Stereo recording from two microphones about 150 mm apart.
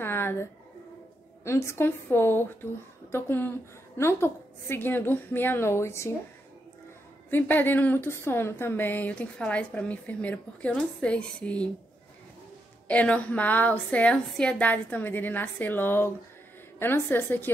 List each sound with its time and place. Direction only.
0.0 s a sound: 15° left (ahead or behind)
1.4 s a woman's voice: 20° left (ahead or behind)
7.2 s a woman's voice: 15° left (ahead or behind)
12.8 s a woman's voice: 10° left (ahead or behind)